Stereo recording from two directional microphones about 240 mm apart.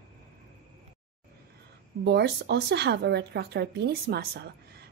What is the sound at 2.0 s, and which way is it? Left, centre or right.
A woman's voice, right.